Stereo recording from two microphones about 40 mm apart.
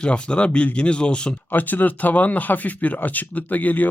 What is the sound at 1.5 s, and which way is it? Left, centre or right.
Speech, left.